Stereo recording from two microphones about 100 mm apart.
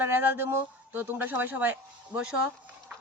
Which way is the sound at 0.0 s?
20° right (ahead or behind).